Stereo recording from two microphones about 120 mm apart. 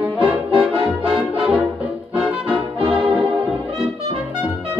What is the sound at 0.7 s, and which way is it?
Music, 45° right (ahead or behind).